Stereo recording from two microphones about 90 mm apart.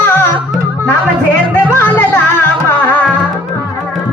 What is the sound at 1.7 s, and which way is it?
Music, 25° left (ahead or behind).